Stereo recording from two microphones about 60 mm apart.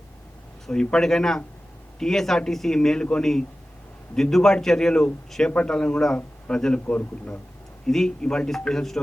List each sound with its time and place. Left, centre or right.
0.7 s a man's voice: centre
7.9 s a man's voice: centre